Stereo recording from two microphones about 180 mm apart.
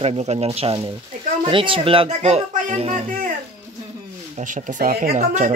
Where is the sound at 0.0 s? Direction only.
35° right (ahead or behind).